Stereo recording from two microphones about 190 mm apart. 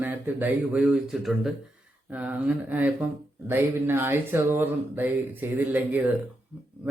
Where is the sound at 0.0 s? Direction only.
10° right (ahead or behind).